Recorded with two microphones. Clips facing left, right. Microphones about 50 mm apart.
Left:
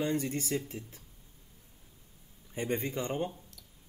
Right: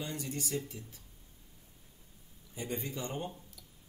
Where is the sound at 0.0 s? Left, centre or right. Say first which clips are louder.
Left 7 dB; left.